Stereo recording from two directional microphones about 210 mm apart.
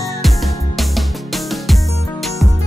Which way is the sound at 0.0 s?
Centre (ahead or behind).